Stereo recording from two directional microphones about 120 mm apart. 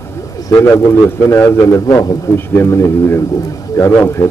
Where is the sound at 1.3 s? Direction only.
25° left (ahead or behind).